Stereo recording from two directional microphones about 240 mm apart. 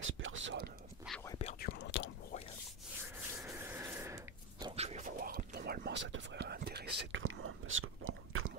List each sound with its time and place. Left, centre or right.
0.0 s whispering: right
1.4 s whispering: left
3.3 s a sound: centre; by 8.5 s right